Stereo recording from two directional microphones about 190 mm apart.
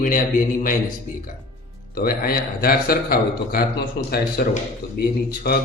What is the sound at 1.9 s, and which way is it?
A man's voice, 50° left (ahead or behind).